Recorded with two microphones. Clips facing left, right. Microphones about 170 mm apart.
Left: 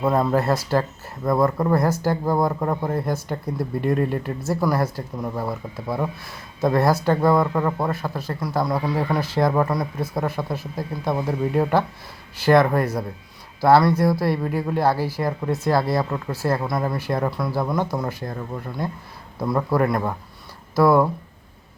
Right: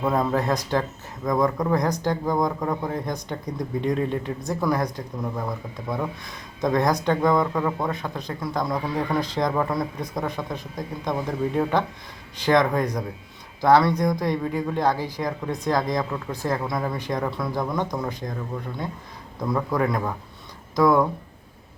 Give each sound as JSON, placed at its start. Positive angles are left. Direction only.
{"t": 0.0, "sound": "speech", "side_deg": 5}
{"t": 19.4, "sound": "speech", "side_deg": 5}